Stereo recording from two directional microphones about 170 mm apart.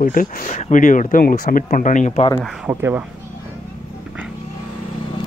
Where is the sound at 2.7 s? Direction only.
10° right (ahead or behind).